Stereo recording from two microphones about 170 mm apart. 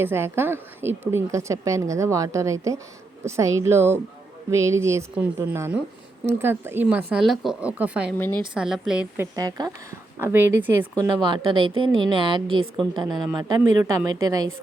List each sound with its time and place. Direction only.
0.0 s a woman's voice: 15° right (ahead or behind)
9.2 s a woman's voice: 20° right (ahead or behind)
11.2 s a woman's voice: 30° right (ahead or behind)